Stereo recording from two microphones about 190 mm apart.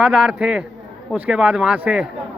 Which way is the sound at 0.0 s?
5° right (ahead or behind).